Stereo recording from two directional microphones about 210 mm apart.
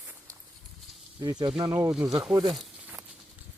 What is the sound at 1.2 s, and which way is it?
Speech, 20° right (ahead or behind).